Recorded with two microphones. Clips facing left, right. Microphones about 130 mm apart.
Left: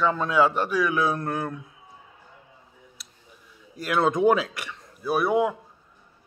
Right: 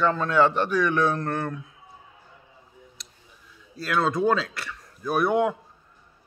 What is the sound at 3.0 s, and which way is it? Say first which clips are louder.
Tick-tock: right 1 dB; 5° left (ahead or behind).